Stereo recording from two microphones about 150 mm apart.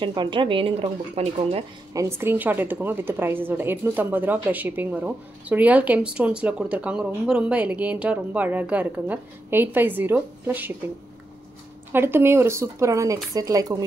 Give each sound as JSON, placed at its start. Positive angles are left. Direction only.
{"t": 0.0, "sound": "speech", "side_deg": -30}
{"t": 2.0, "sound": "a woman's voice", "side_deg": -15}
{"t": 11.9, "sound": "speech", "side_deg": -15}